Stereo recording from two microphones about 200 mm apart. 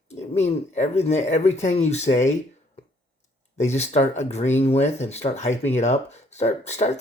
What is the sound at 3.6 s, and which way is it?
Speech, 35° left (ahead or behind).